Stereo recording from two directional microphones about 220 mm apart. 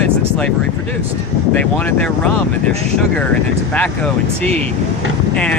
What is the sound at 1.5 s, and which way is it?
Speech, 5° left (ahead or behind).